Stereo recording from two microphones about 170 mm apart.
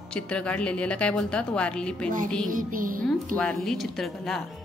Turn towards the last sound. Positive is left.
turn(degrees=0)  # may be behind; listen again after turning